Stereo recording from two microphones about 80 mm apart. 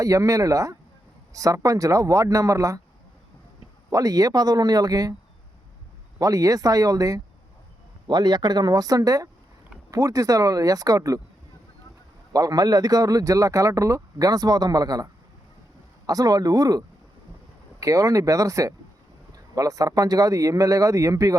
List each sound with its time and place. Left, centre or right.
0.0 s speech: right
3.9 s speech: right
6.1 s speech: right
8.0 s speech: right
12.3 s speech: right